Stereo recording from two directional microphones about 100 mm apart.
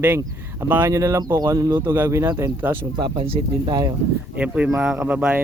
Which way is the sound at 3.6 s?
40° right (ahead or behind).